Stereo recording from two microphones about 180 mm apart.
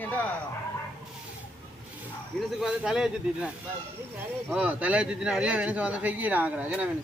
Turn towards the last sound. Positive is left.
turn(degrees=-10)  # may be behind; listen again after turning